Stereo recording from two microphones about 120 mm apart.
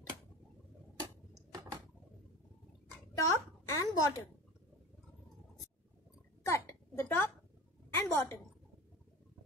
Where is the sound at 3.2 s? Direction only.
25° left (ahead or behind).